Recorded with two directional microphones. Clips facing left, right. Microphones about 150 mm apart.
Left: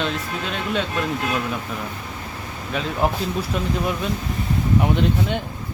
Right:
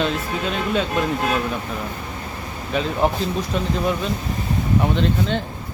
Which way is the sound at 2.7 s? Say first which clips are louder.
Right 4 dB; centre (ahead or behind).